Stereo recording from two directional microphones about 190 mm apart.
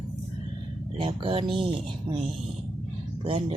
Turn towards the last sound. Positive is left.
turn(degrees=-30)  # may be behind; listen again after turning